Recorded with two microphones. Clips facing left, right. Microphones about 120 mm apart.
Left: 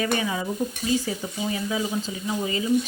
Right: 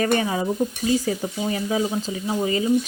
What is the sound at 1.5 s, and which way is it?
Speech, 40° right (ahead or behind).